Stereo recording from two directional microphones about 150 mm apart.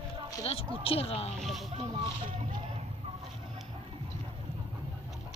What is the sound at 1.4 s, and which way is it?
Speech, centre (ahead or behind).